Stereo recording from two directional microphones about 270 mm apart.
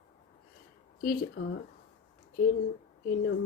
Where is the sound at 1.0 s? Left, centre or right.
Left.